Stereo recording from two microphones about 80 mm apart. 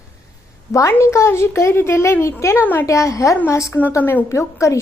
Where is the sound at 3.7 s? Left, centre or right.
Left.